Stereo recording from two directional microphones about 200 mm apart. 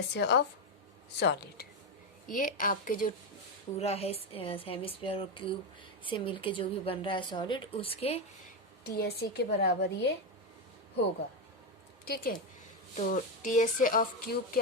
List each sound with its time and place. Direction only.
0.1 s speech: 55° left (ahead or behind)
2.3 s speech: 40° left (ahead or behind)
3.8 s speech: 30° left (ahead or behind)
8.8 s a woman's voice: 55° left (ahead or behind)
12.0 s a woman's voice: 45° left (ahead or behind)